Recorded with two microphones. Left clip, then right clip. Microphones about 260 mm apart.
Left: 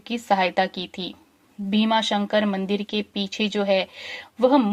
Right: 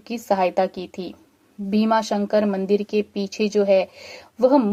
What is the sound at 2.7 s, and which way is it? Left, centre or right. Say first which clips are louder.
Speech: right 5 dB; left.